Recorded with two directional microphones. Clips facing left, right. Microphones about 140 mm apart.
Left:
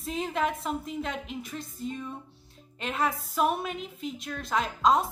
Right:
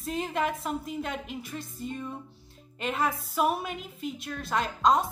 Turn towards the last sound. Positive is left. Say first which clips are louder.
# even
turn(degrees=0)  # may be behind; listen again after turning